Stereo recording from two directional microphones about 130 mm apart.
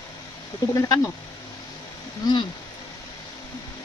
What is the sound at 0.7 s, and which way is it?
Speech, 25° left (ahead or behind).